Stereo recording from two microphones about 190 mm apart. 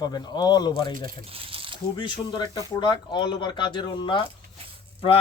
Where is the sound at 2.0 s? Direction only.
25° left (ahead or behind).